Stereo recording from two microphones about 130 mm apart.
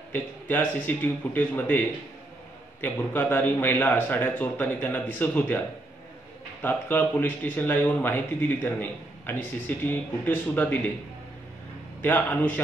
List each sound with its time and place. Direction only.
0.1 s speech: 15° left (ahead or behind)
6.6 s speech: 15° left (ahead or behind)
12.0 s speech: 15° left (ahead or behind)